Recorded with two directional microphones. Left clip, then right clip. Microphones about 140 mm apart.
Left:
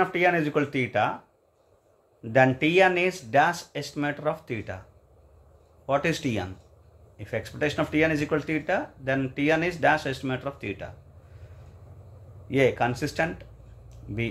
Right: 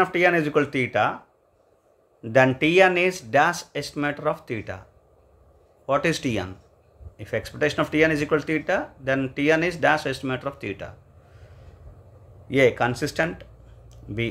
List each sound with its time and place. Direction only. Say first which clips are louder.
0.0 s speech: right 3 dB; 25° right (ahead or behind)
2.2 s speech: right 2 dB; 25° right (ahead or behind)
5.9 s speech: right 3 dB; 20° right (ahead or behind)
12.4 s speech: right 3 dB; 25° right (ahead or behind)